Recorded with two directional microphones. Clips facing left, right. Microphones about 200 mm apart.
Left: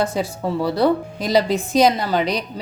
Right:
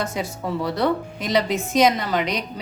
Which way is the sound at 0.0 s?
30° left (ahead or behind).